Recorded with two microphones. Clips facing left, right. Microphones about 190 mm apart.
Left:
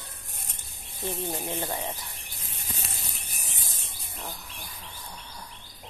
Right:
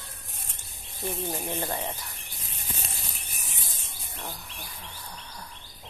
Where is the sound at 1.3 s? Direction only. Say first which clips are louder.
Even; 10° left (ahead or behind).